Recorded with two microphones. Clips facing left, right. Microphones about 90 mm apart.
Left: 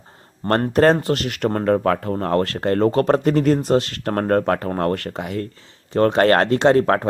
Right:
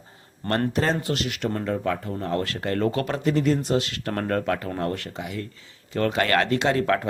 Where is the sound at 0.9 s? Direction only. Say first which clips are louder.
Left 5 dB; 45° left (ahead or behind).